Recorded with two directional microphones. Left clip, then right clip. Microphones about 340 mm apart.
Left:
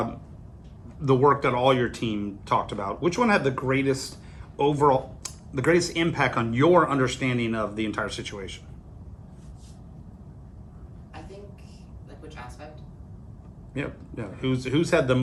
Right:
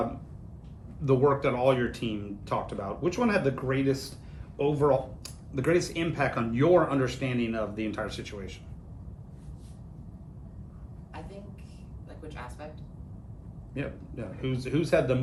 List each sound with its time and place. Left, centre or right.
1.0 s speech: left
12.3 s a sound: centre
13.7 s speech: left